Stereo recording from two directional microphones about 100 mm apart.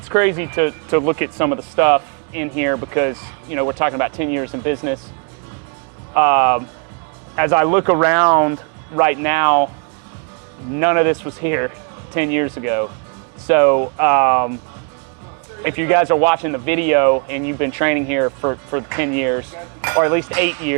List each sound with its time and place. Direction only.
0.1 s speech: 15° right (ahead or behind)
6.1 s speech: 15° right (ahead or behind)
10.8 s speech: 20° right (ahead or behind)
15.6 s speech: 20° right (ahead or behind)
20.4 s speech: 15° right (ahead or behind)